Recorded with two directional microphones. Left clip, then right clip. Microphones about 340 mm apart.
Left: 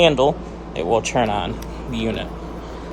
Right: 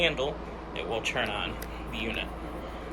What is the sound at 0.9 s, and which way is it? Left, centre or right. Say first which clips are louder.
Speech: left 12 dB; centre.